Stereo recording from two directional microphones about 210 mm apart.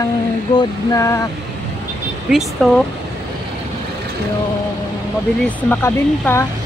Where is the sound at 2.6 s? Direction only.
5° left (ahead or behind).